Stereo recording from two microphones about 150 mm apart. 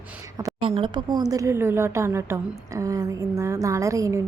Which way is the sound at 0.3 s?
25° right (ahead or behind).